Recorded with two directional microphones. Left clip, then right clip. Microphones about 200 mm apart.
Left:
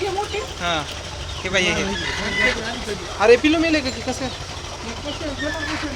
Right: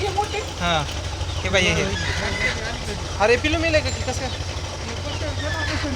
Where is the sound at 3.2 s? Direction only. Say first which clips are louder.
Left 4 dB; 15° left (ahead or behind).